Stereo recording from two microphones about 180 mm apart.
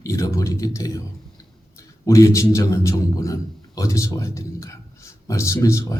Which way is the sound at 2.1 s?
15° left (ahead or behind).